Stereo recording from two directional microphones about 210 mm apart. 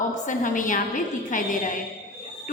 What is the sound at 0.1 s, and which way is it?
A woman's voice, 40° left (ahead or behind).